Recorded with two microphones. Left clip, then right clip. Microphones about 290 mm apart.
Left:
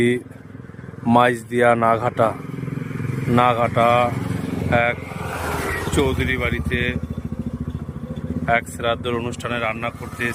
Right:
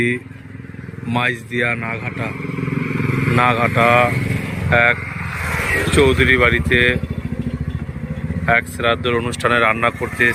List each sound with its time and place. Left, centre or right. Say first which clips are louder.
1.0 s speech: left 4 dB; centre
2.8 s vehicle: right 8 dB; centre
5.8 s speech: right 9 dB; centre
8.4 s speech: right 4 dB; centre